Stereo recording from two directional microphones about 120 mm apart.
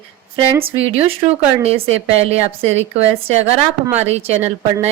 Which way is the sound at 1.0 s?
55° right (ahead or behind).